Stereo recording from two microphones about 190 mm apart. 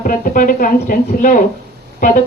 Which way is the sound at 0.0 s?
45° left (ahead or behind).